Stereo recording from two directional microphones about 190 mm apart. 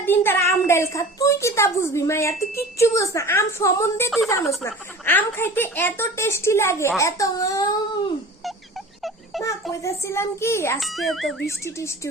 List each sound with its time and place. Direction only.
0.0 s a woman's voice: 10° left (ahead or behind)
9.8 s a woman's voice: 15° left (ahead or behind)
10.8 s speech: centre (ahead or behind)
11.4 s a woman's voice: 15° left (ahead or behind)